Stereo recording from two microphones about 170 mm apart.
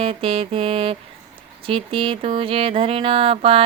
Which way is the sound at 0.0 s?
30° right (ahead or behind).